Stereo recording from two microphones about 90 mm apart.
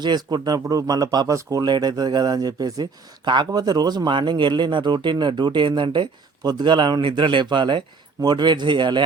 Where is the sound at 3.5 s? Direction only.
45° right (ahead or behind).